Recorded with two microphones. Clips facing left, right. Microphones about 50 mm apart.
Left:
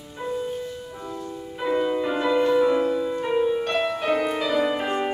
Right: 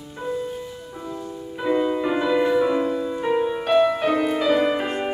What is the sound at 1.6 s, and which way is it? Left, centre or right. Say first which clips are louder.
Music: right 2 dB; centre.